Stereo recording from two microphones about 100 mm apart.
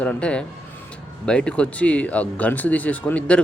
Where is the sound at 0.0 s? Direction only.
10° left (ahead or behind).